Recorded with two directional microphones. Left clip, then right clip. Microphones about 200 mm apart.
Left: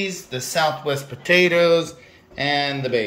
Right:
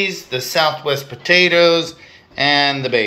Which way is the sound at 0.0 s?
5° left (ahead or behind).